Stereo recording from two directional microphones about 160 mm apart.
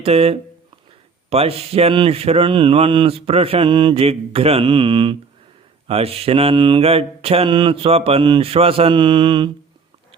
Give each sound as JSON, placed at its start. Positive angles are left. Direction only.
{"t": 0.0, "sound": "speech", "side_deg": -40}